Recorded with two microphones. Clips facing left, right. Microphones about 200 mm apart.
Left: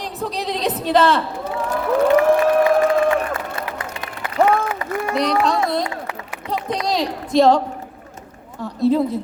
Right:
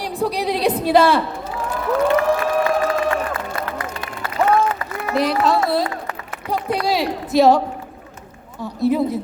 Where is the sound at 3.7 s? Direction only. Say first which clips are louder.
Right 2 dB; 15° left (ahead or behind).